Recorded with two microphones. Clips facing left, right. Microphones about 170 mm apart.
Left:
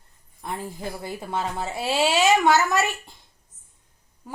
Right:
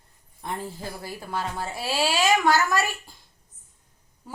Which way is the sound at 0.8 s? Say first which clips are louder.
Left 3 dB; 25° left (ahead or behind).